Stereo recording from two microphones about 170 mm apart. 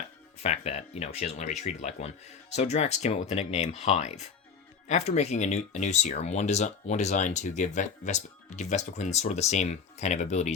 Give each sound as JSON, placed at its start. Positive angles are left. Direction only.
{"t": 0.3, "sound": "speech", "side_deg": 40}